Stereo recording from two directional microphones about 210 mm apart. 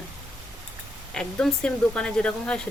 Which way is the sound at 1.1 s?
5° left (ahead or behind).